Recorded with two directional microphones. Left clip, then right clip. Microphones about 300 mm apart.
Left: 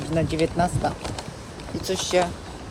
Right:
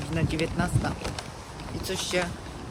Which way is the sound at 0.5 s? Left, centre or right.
Left.